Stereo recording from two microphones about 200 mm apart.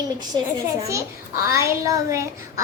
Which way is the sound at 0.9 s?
15° right (ahead or behind).